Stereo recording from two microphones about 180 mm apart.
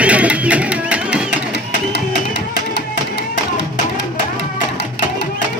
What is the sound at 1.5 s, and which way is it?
Music, 70° left (ahead or behind).